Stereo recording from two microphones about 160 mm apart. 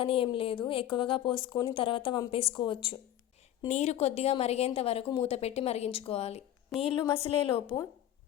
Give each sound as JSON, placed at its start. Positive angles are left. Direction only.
{"t": 0.0, "sound": "a woman's voice", "side_deg": 35}
{"t": 3.7, "sound": "a woman's voice", "side_deg": 45}
{"t": 6.7, "sound": "a woman's voice", "side_deg": 0}
{"t": 7.2, "sound": "a woman's voice", "side_deg": 35}